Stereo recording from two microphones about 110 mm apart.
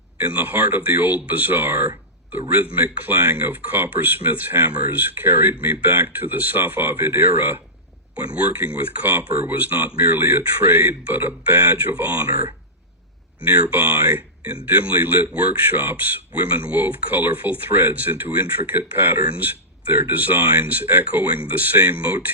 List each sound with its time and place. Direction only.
0.2 s speech: 15° right (ahead or behind)
13.5 s speech: 15° right (ahead or behind)